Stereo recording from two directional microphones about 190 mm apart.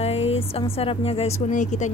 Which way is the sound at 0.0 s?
30° left (ahead or behind).